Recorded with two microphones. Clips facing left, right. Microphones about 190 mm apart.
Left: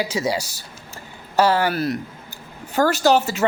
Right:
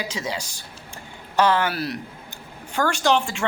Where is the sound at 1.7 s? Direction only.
Centre (ahead or behind).